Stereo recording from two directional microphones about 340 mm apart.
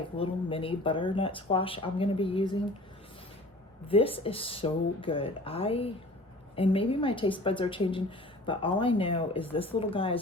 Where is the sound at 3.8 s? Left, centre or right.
Centre.